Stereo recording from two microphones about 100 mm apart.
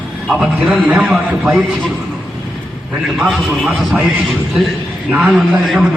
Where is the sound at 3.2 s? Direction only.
Centre (ahead or behind).